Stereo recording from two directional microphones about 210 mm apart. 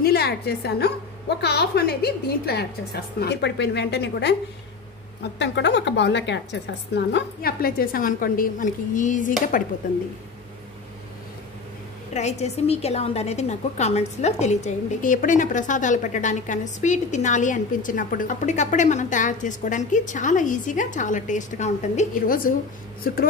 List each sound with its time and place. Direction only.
0.0 s a woman's voice: 50° left (ahead or behind)
5.4 s a woman's voice: 55° left (ahead or behind); by 9.7 s 40° left (ahead or behind)
12.1 s a woman's voice: 30° left (ahead or behind)